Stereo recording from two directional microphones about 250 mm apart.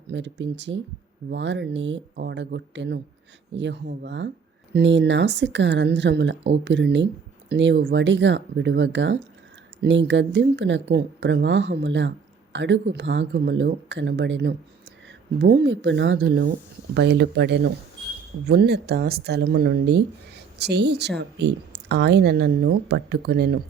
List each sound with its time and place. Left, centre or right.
0.1 s speech: right